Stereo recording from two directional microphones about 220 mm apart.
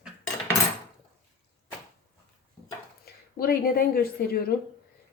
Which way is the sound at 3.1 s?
45° left (ahead or behind).